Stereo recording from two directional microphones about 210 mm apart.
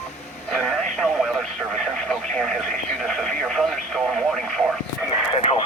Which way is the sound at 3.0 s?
Centre (ahead or behind).